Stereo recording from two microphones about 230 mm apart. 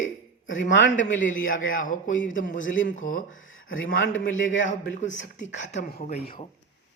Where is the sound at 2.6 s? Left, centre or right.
Left.